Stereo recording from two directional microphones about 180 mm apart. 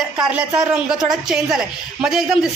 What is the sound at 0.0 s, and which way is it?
Speech, 5° right (ahead or behind).